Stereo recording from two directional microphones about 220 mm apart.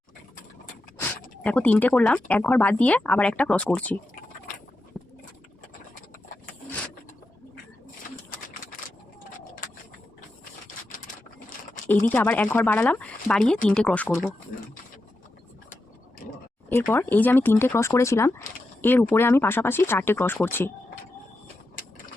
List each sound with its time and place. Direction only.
0.9 s speech: 10° left (ahead or behind)
4.9 s a sound: centre (ahead or behind)
10.7 s typewriter: 35° left (ahead or behind)
11.9 s speech: 10° left (ahead or behind)
16.6 s speech: 10° left (ahead or behind)